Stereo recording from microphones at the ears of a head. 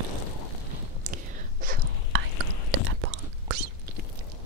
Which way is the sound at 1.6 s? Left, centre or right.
Right.